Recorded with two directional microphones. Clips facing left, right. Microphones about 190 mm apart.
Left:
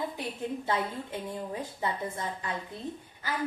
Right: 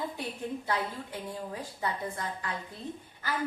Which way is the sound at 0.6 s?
25° left (ahead or behind).